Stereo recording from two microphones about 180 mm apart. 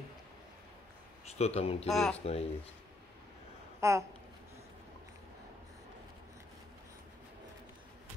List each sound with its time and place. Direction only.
1.2 s speech: 35° left (ahead or behind)
1.9 s speech: centre (ahead or behind)
2.1 s speech: 35° left (ahead or behind)
3.8 s speech: 15° right (ahead or behind)